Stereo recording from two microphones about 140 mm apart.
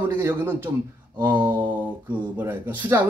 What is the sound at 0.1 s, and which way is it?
A man's voice, 15° right (ahead or behind).